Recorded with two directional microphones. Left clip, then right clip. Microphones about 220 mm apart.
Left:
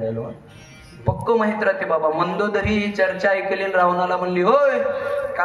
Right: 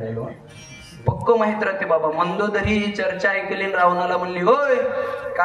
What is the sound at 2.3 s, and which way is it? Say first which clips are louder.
Music: even; 15° left (ahead or behind).